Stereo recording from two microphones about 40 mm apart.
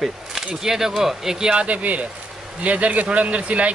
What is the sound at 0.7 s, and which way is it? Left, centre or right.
Speech, centre.